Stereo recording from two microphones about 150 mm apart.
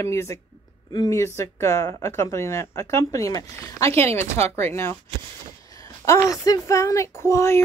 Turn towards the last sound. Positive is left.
turn(degrees=20)  # may be behind; listen again after turning